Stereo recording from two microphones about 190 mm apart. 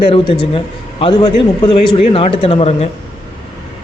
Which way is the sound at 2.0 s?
30° left (ahead or behind).